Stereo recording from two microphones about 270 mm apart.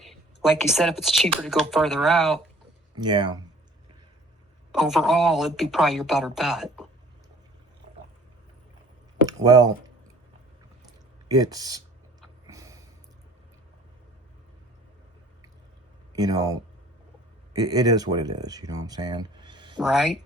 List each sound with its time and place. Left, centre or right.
0.0 s a woman's voice: centre
3.0 s speech: centre
4.7 s a woman's voice: centre
9.2 s a sound: centre
11.3 s speech: centre
12.5 s a sound: centre
16.1 s speech: centre
17.5 s speech: centre
19.8 s a woman's voice: centre